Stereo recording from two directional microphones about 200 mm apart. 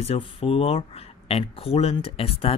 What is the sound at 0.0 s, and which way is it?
Speech, 30° left (ahead or behind).